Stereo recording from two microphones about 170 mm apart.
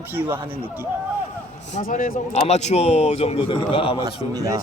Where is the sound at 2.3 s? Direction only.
40° left (ahead or behind).